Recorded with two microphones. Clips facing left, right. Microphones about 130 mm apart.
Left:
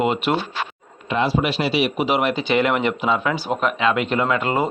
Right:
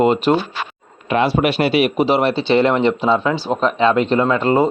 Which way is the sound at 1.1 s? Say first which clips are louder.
Right 4 dB; 65° right (ahead or behind).